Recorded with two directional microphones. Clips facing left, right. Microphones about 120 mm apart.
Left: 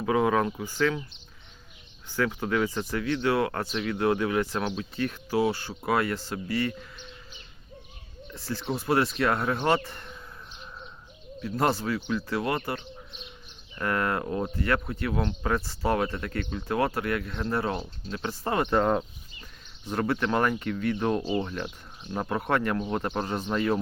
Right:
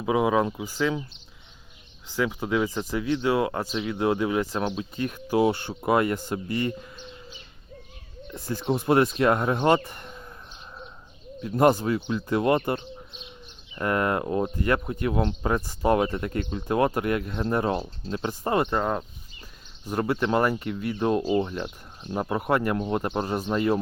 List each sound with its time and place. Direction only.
0.0 s speech: 15° right (ahead or behind)
2.1 s speech: 10° right (ahead or behind)
8.3 s speech: 20° right (ahead or behind)
11.4 s speech: 20° right (ahead or behind)
18.3 s speech: 15° right (ahead or behind)
18.7 s speech: centre (ahead or behind)
19.8 s speech: 15° right (ahead or behind)